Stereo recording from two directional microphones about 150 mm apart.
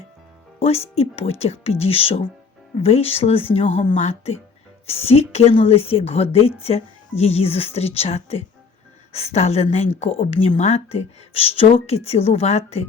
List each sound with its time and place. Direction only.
0.6 s a woman's voice: 40° left (ahead or behind)